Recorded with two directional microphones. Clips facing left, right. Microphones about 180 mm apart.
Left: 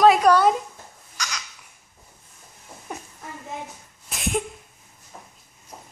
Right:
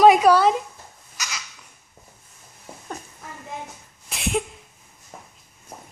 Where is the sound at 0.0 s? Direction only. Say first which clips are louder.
Right 2 dB; 10° right (ahead or behind).